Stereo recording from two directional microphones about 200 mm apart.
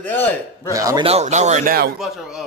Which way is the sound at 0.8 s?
15° right (ahead or behind).